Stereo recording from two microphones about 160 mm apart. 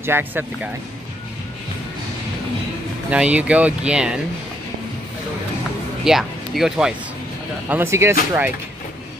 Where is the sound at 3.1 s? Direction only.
5° right (ahead or behind).